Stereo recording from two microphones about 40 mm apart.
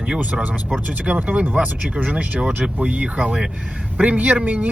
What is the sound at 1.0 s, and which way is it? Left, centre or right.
Speech, right.